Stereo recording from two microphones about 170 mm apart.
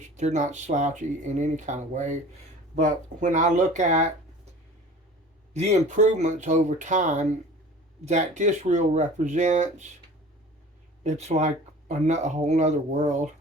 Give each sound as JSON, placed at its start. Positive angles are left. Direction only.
{"t": 0.2, "sound": "speech", "side_deg": -45}
{"t": 5.5, "sound": "speech", "side_deg": -45}
{"t": 11.0, "sound": "speech", "side_deg": -40}